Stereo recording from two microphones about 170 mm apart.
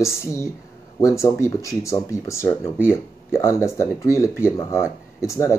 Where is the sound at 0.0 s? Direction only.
15° left (ahead or behind).